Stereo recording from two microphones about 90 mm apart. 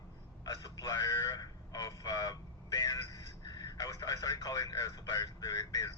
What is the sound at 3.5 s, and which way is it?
Radio, 50° left (ahead or behind).